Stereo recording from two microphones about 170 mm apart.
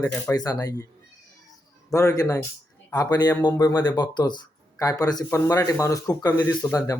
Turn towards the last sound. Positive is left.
turn(degrees=20)  # may be behind; listen again after turning